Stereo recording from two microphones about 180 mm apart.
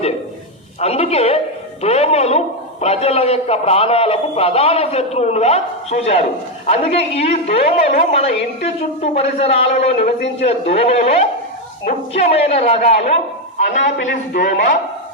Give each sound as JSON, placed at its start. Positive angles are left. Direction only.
{"t": 0.8, "sound": "a man's voice", "side_deg": 35}
{"t": 14.3, "sound": "a man's voice", "side_deg": 60}